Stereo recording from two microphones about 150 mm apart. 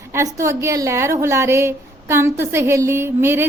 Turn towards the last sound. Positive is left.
turn(degrees=-15)  # may be behind; listen again after turning